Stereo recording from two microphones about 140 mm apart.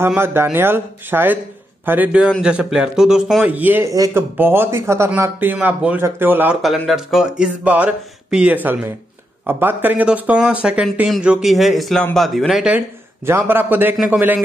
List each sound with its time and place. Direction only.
0.0 s speech: 15° right (ahead or behind)
3.9 s speech: 25° right (ahead or behind)
6.6 s speech: centre (ahead or behind)
12.7 s speech: 15° right (ahead or behind)